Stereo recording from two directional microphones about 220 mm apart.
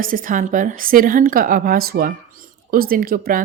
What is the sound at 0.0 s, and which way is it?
A woman's voice, 40° right (ahead or behind).